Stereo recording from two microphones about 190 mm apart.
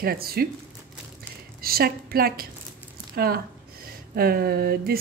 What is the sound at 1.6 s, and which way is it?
Speech, 50° right (ahead or behind).